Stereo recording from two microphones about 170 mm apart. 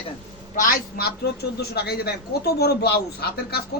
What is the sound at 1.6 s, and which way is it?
A man's voice, 70° left (ahead or behind).